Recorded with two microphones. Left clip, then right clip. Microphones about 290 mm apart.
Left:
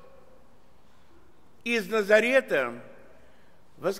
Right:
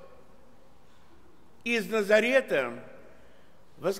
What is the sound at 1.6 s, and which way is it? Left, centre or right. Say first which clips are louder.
A man's voice: left 1 dB; centre.